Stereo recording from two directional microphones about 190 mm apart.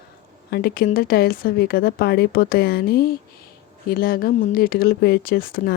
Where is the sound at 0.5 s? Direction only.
55° left (ahead or behind).